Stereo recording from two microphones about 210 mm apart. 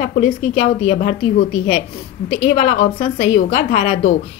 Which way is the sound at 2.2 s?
30° left (ahead or behind).